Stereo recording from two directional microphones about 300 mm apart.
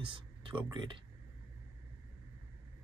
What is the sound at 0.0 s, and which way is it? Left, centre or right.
Speech, centre.